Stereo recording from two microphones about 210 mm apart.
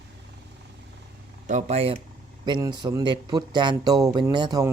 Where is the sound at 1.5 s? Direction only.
35° right (ahead or behind).